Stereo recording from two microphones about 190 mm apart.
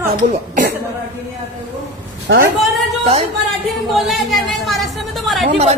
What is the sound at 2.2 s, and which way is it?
Speech, 55° right (ahead or behind).